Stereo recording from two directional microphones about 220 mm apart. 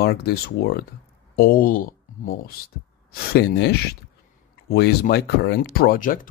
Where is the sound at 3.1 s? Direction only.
50° left (ahead or behind).